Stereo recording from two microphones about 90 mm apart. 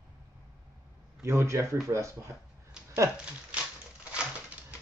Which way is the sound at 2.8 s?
10° right (ahead or behind).